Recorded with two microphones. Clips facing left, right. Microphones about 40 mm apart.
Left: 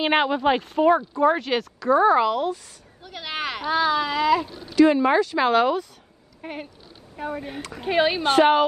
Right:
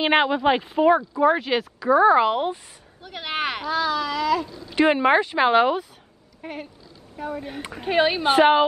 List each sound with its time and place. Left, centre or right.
0.0 s speech: centre
2.2 s speech: right
3.0 s speech: centre
3.6 s speech: centre
4.7 s speech: right; by 5.9 s centre
6.4 s speech: centre
7.8 s speech: centre